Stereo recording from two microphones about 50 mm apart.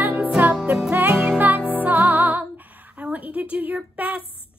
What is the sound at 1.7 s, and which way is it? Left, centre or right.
Music, right.